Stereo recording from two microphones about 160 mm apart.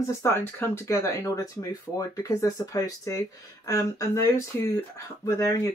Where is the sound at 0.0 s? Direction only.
20° left (ahead or behind).